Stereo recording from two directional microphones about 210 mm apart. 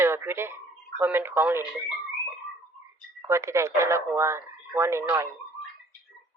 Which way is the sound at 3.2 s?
15° right (ahead or behind).